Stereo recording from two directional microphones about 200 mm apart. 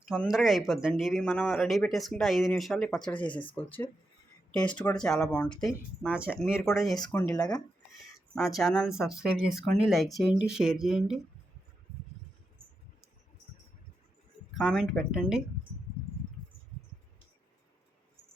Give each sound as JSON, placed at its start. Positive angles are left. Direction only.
{"t": 0.1, "sound": "speech", "side_deg": 0}
{"t": 7.0, "sound": "speech", "side_deg": 15}
{"t": 8.4, "sound": "speech", "side_deg": 0}
{"t": 14.6, "sound": "speech", "side_deg": 0}